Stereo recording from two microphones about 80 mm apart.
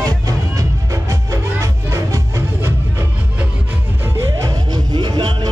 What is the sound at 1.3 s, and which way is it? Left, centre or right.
Music, right.